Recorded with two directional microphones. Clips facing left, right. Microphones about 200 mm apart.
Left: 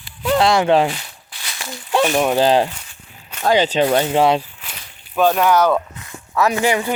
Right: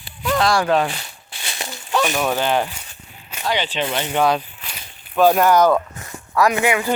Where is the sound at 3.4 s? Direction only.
45° left (ahead or behind).